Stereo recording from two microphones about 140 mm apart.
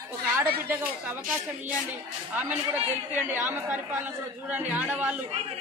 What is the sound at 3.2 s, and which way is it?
A woman's voice, 15° right (ahead or behind).